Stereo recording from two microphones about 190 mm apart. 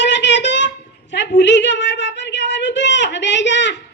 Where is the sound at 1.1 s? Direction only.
65° left (ahead or behind).